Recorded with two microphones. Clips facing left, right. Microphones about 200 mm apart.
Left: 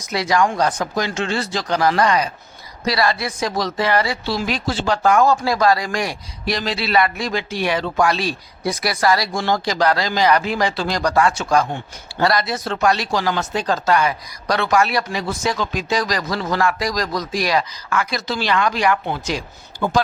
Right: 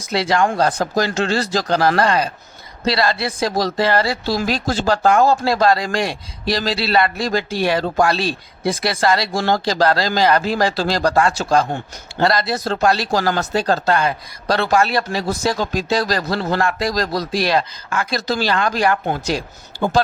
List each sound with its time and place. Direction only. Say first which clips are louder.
0.1 s a man's voice: right 1 dB; 30° right (ahead or behind)
5.0 s a man's voice: even; 30° right (ahead or behind)
18.3 s a man's voice: right 1 dB; 40° right (ahead or behind)